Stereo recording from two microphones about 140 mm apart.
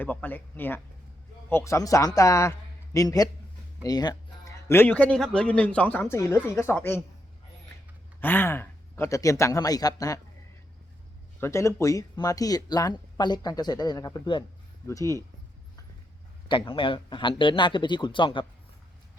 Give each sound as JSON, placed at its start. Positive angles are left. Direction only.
{"t": 0.0, "sound": "a man's voice", "side_deg": 10}
{"t": 8.2, "sound": "speech", "side_deg": 15}
{"t": 11.3, "sound": "speech", "side_deg": 20}
{"t": 16.5, "sound": "a man's voice", "side_deg": 40}